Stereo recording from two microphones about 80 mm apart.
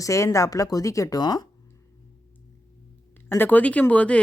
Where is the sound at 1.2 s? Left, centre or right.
Left.